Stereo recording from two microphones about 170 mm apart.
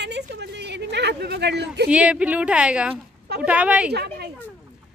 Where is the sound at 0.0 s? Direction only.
85° right.